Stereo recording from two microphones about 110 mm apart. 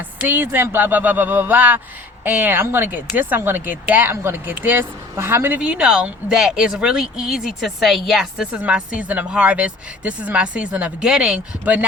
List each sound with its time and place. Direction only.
0.2 s speech: 15° right (ahead or behind)